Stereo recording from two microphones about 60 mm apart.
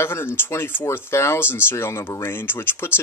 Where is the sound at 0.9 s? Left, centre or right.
Left.